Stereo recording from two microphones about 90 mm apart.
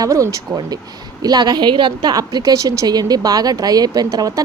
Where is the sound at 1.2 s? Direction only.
50° right (ahead or behind).